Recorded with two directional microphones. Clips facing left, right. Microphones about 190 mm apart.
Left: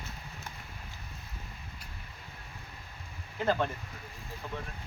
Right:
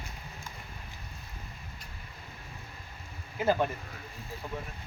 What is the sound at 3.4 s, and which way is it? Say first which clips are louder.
Speech: right 2 dB; 10° right (ahead or behind).